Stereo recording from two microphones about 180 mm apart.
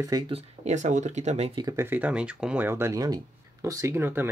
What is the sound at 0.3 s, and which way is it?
Speech, 40° right (ahead or behind).